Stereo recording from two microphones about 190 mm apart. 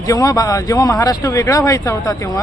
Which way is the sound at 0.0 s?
20° left (ahead or behind).